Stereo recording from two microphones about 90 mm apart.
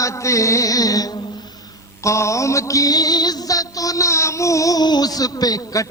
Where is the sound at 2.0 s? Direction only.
35° left (ahead or behind).